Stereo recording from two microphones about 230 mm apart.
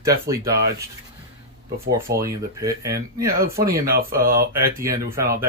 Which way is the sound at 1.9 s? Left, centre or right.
Centre.